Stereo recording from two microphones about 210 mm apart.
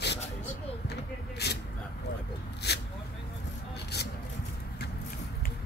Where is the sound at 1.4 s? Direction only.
50° left (ahead or behind).